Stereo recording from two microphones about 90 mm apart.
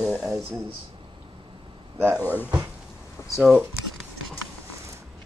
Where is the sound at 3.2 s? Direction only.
30° left (ahead or behind).